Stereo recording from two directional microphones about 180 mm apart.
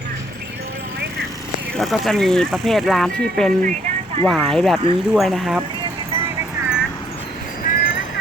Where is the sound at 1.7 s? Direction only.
Centre (ahead or behind).